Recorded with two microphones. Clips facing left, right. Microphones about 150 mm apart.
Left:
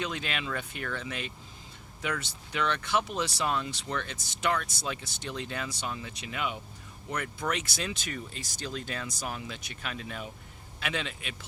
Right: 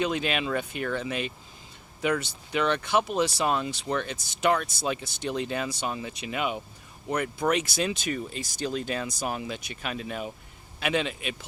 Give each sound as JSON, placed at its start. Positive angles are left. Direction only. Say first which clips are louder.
{"t": 0.0, "sound": "speech", "louder": "right 7 dB", "side_deg": -15}